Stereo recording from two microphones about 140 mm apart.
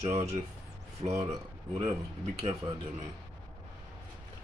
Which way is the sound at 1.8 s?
45° right (ahead or behind).